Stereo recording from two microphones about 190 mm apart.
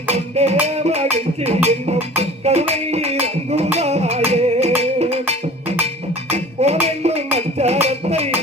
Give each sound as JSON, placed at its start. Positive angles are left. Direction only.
{"t": 0.1, "sound": "music", "side_deg": -35}